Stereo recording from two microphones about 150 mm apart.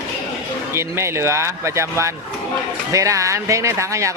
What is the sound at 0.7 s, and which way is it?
A man's voice, 20° right (ahead or behind).